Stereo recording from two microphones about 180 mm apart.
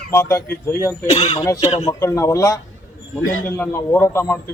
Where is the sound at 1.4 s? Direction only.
15° left (ahead or behind).